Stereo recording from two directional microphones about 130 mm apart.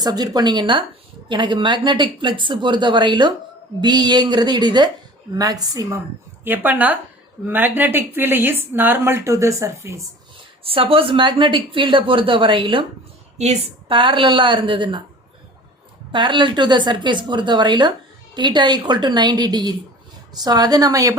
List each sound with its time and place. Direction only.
0.0 s a woman's voice: 30° right (ahead or behind)
6.4 s speech: 15° right (ahead or behind)
10.6 s a woman's voice: 45° right (ahead or behind)
16.1 s a woman's voice: 40° right (ahead or behind)